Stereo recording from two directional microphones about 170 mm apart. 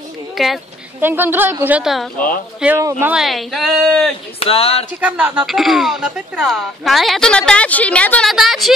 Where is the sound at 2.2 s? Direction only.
55° left (ahead or behind).